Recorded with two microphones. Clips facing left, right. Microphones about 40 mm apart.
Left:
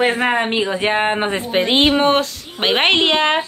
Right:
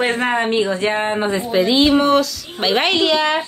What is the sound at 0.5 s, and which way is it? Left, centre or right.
A woman's voice, left.